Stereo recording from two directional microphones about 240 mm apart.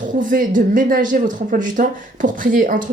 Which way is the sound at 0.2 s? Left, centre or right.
Right.